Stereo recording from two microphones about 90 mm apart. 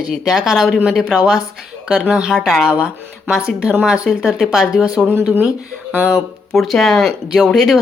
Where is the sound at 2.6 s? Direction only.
10° right (ahead or behind).